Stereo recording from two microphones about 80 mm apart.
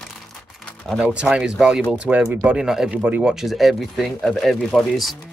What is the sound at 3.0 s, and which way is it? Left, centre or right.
Speech, centre.